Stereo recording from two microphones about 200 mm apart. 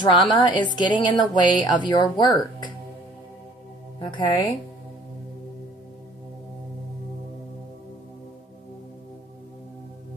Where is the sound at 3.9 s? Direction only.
25° left (ahead or behind).